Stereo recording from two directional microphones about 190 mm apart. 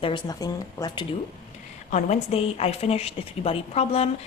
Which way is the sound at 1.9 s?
35° left (ahead or behind).